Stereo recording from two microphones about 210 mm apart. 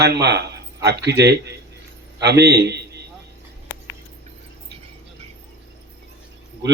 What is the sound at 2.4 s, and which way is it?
Speech, 50° right (ahead or behind).